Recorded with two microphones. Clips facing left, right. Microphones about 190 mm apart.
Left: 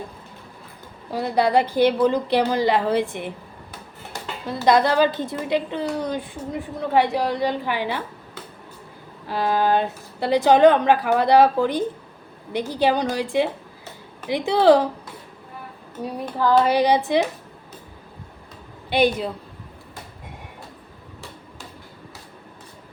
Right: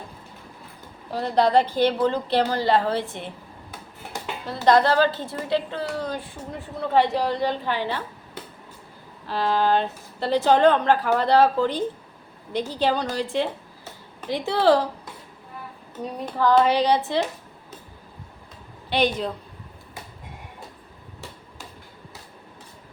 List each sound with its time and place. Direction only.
1.1 s a woman's voice: 10° left (ahead or behind)
4.4 s a woman's voice: 15° left (ahead or behind)
9.2 s a woman's voice: 10° left (ahead or behind)
16.0 s a woman's voice: 5° left (ahead or behind)
18.9 s a woman's voice: 10° left (ahead or behind)